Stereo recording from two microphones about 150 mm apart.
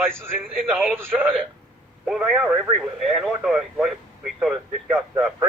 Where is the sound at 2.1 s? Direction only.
5° right (ahead or behind).